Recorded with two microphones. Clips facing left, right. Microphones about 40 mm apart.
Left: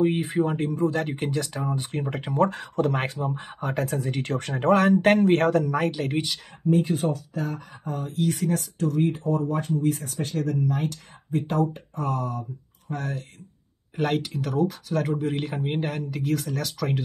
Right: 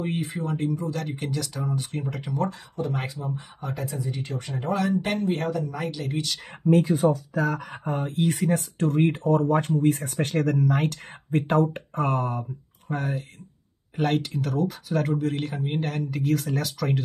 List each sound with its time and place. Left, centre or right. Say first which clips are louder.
0.2 s speech: left 4 dB; left
2.7 s speech: left 5 dB; left
3.3 s speech: left 3 dB; left
5.2 s speech: left 6 dB; left
6.6 s speech: right 2 dB; centre
7.8 s speech: right 1 dB; right
8.4 s speech: right 2 dB; right
8.7 s speech: right 2 dB; right
12.8 s speech: right 2 dB; centre
13.9 s speech: right 1 dB; centre
15.9 s speech: right 1 dB; centre